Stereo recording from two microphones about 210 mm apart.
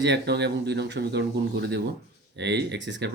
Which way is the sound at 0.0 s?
55° right (ahead or behind).